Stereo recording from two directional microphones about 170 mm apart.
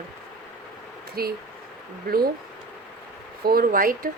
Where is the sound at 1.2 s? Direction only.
65° right (ahead or behind).